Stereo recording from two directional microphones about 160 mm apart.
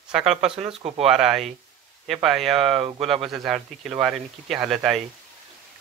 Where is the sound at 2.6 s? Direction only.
35° right (ahead or behind).